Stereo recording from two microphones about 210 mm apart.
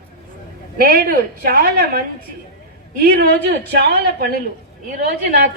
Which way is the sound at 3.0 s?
50° right (ahead or behind).